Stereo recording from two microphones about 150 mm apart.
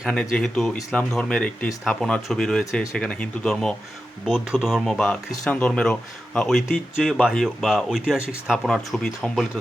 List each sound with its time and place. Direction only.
0.0 s speech: 5° left (ahead or behind)